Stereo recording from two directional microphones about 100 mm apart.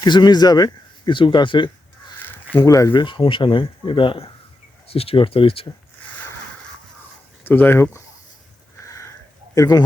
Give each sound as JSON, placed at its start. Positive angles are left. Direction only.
{"t": 0.0, "sound": "speech", "side_deg": 45}
{"t": 2.1, "sound": "a sound", "side_deg": 20}
{"t": 2.6, "sound": "a man's voice", "side_deg": 30}
{"t": 2.9, "sound": "speech", "side_deg": 55}
{"t": 4.9, "sound": "speech", "side_deg": 75}
{"t": 7.4, "sound": "speech", "side_deg": 20}
{"t": 8.8, "sound": "a sound", "side_deg": 30}
{"t": 9.6, "sound": "a man's voice", "side_deg": 40}